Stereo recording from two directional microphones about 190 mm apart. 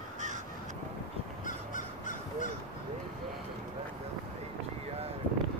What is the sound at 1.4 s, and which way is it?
Crow, 40° left (ahead or behind).